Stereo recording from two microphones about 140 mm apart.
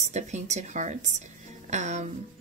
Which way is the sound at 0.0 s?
55° right (ahead or behind).